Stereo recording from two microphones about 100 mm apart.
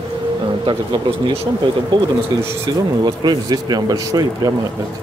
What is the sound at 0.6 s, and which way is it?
Speech, 55° right (ahead or behind).